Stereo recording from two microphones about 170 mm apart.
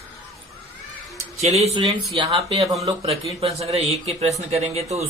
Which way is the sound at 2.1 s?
30° right (ahead or behind).